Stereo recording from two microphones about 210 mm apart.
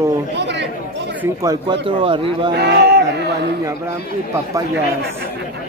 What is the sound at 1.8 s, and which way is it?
Speech, 25° right (ahead or behind).